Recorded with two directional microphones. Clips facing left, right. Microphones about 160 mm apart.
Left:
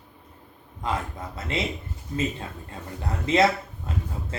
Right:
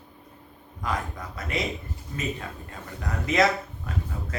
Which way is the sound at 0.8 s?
25° left (ahead or behind).